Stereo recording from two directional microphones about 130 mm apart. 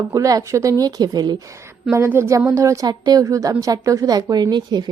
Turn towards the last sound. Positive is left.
turn(degrees=-35)  # may be behind; listen again after turning